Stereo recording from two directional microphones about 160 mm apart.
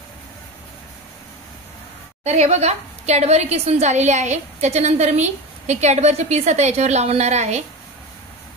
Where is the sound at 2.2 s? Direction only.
45° right (ahead or behind).